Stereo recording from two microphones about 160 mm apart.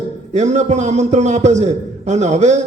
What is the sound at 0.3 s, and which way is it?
A man's voice, 45° right (ahead or behind).